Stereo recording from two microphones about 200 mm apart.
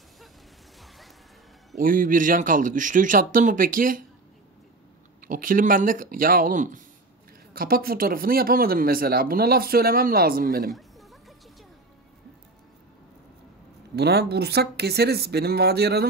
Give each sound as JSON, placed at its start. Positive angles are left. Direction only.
{"t": 1.8, "sound": "speech", "side_deg": -45}
{"t": 5.2, "sound": "speech", "side_deg": -45}
{"t": 10.7, "sound": "a sound", "side_deg": 0}
{"t": 13.9, "sound": "speech", "side_deg": -55}